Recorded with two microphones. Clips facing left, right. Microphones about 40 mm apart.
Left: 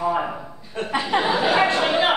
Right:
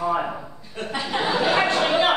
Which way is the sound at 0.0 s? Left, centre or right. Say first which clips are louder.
Left 1 dB; centre.